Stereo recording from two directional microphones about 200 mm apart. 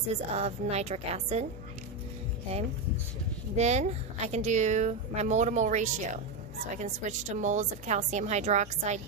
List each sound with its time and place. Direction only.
0.1 s speech: 30° right (ahead or behind)
2.5 s speech: 30° right (ahead or behind)